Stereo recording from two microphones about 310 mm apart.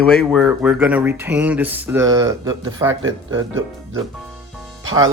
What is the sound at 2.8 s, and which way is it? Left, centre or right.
Speech, right.